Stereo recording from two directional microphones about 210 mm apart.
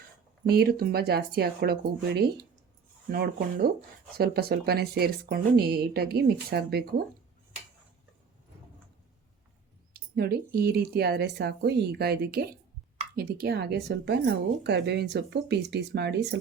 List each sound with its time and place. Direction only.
0.4 s speech: 50° right (ahead or behind)
9.9 s speech: 50° right (ahead or behind)